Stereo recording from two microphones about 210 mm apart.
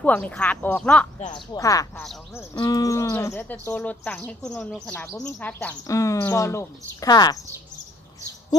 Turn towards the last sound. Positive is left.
turn(degrees=20)  # may be behind; listen again after turning